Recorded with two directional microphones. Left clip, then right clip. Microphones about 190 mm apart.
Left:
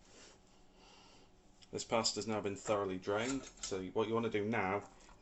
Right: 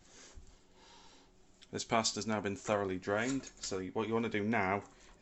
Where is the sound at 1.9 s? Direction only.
50° right (ahead or behind).